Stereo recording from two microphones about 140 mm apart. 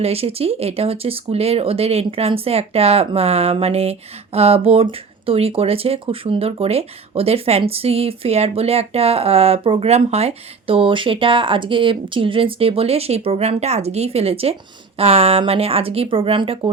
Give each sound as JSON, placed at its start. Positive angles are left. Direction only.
{"t": 0.0, "sound": "speech", "side_deg": -45}